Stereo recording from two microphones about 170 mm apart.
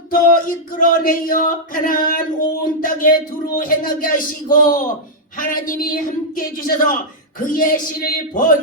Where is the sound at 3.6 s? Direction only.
55° left (ahead or behind).